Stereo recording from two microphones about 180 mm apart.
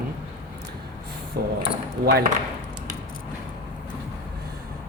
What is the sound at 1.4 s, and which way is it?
Speech, 60° right (ahead or behind).